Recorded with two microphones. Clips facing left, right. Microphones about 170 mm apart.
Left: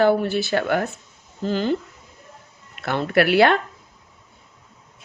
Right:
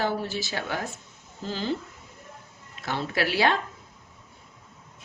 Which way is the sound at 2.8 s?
60° left (ahead or behind).